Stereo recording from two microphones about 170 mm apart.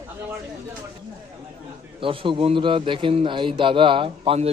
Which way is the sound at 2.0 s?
30° right (ahead or behind).